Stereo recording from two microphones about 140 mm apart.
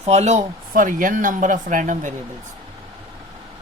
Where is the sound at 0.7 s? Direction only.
75° right (ahead or behind).